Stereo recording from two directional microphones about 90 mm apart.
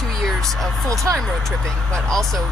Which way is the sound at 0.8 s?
40° right (ahead or behind).